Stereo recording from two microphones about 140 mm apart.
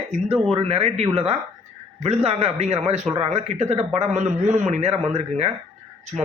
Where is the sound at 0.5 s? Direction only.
45° right (ahead or behind).